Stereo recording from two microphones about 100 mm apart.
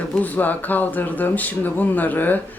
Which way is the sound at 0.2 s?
15° left (ahead or behind).